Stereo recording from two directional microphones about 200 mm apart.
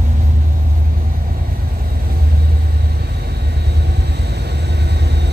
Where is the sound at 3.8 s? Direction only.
55° right (ahead or behind).